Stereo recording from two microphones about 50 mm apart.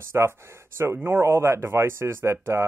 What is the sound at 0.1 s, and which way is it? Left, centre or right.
Speech, right.